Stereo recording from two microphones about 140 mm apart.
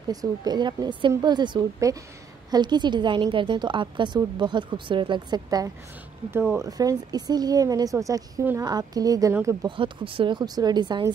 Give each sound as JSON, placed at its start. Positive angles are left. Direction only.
{"t": 0.1, "sound": "a woman's voice", "side_deg": -25}
{"t": 6.3, "sound": "a woman's voice", "side_deg": -20}
{"t": 9.7, "sound": "a woman's voice", "side_deg": -40}